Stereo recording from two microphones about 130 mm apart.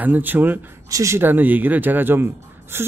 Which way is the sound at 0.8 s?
25° right (ahead or behind).